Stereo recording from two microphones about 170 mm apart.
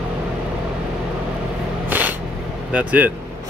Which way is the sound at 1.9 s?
10° right (ahead or behind).